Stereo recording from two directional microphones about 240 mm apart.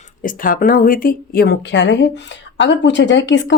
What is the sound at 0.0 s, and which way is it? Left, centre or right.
Speech, left.